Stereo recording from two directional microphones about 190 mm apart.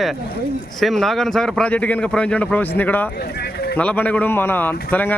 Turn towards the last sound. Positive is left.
turn(degrees=10)  # may be behind; listen again after turning